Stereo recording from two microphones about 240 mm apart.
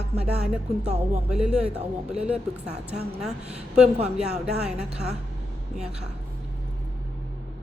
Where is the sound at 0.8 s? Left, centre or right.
Right.